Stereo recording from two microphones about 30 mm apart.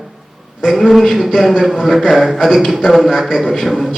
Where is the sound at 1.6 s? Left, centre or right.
Centre.